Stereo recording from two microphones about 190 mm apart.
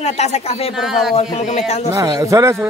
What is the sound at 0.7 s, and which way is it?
Speech, centre (ahead or behind).